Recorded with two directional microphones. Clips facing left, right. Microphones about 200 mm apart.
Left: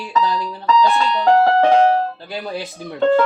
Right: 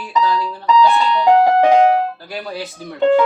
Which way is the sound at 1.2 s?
15° right (ahead or behind).